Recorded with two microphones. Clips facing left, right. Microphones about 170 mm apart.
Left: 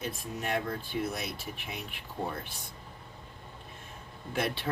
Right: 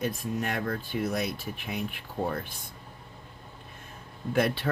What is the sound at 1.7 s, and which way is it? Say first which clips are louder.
Speech: right 6 dB; 50° right (ahead or behind).